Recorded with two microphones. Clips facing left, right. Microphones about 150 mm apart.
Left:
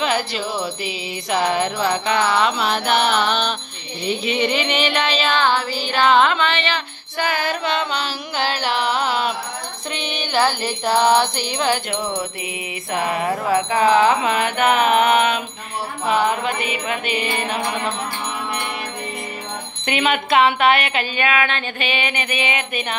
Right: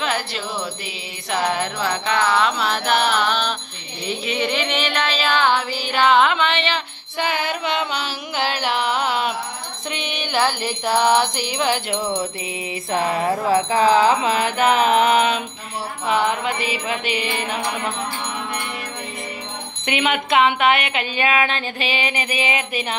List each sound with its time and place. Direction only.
0.0 s music: centre (ahead or behind)
1.5 s music: 5° left (ahead or behind); by 12.2 s 20° right (ahead or behind)
12.9 s music: 30° right (ahead or behind)
13.7 s a sound: 30° right (ahead or behind)
16.1 s music: 15° left (ahead or behind)
16.4 s music: 25° right (ahead or behind)
19.8 s music: 15° right (ahead or behind)
21.2 s a sound: 30° right (ahead or behind)